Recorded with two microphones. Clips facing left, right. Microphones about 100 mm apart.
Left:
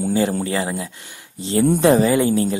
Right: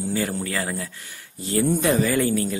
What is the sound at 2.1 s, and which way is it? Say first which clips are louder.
Speech: left 4 dB; 20° left (ahead or behind).